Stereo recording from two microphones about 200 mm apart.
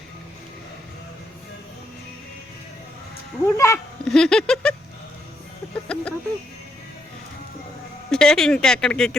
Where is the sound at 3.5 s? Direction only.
15° left (ahead or behind).